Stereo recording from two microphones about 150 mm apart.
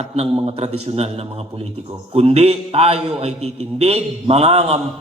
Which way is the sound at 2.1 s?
40° right (ahead or behind).